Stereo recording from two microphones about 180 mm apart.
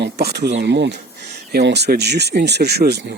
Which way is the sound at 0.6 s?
75° right (ahead or behind).